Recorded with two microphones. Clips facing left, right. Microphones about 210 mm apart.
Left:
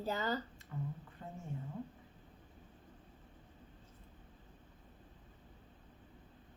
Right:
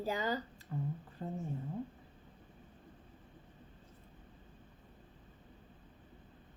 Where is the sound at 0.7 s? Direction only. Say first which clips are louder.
Right 4 dB; 35° right (ahead or behind).